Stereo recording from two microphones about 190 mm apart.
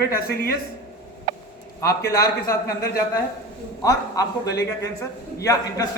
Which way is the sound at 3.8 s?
20° left (ahead or behind).